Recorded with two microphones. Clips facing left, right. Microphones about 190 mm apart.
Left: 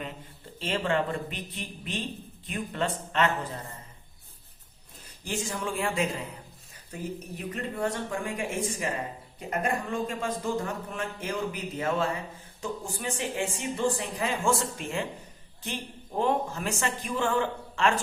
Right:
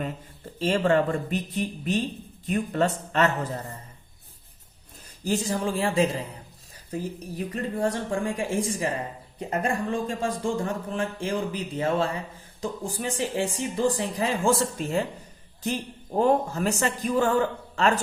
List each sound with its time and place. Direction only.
0.6 s speech: 40° right (ahead or behind)
5.2 s speech: 35° right (ahead or behind)